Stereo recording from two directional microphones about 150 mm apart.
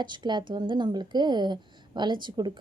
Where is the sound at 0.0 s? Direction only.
30° right (ahead or behind).